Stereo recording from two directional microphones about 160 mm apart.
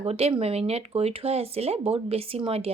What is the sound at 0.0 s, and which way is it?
Speech, 40° right (ahead or behind).